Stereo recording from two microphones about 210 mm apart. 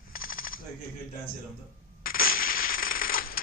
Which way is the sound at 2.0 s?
45° left (ahead or behind).